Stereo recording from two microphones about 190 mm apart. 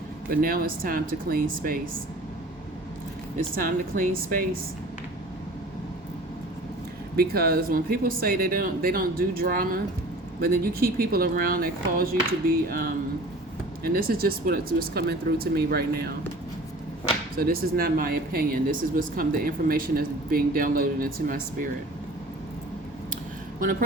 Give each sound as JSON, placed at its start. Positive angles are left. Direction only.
{"t": 0.3, "sound": "speech", "side_deg": -50}
{"t": 3.5, "sound": "speech", "side_deg": -45}
{"t": 7.2, "sound": "speech", "side_deg": -55}
{"t": 13.8, "sound": "speech", "side_deg": -50}
{"t": 17.3, "sound": "speech", "side_deg": -50}